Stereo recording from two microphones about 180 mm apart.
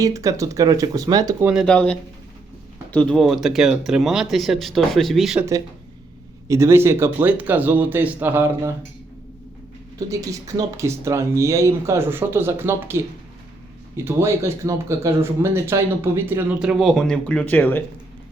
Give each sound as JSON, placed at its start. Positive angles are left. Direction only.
{"t": 0.0, "sound": "speech", "side_deg": -20}
{"t": 1.6, "sound": "speech", "side_deg": 5}
{"t": 6.5, "sound": "speech", "side_deg": -15}
{"t": 10.1, "sound": "speech", "side_deg": -20}